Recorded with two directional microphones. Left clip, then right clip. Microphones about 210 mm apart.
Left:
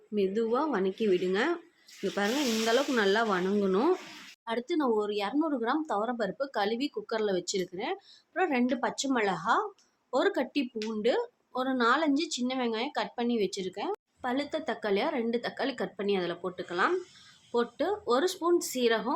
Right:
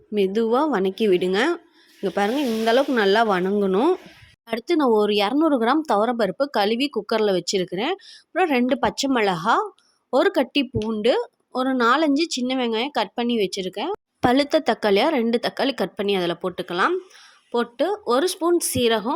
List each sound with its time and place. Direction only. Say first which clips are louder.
0.1 s a woman's voice: right 8 dB; 45° right (ahead or behind)